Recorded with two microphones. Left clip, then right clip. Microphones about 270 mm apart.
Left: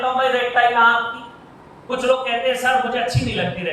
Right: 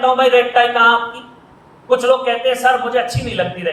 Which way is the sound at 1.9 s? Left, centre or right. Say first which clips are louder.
Right 5 dB; centre.